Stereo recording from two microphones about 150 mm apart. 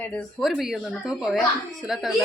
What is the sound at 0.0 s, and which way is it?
Speech, 5° left (ahead or behind).